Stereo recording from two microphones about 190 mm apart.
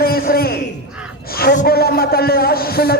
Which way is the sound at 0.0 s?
55° left (ahead or behind).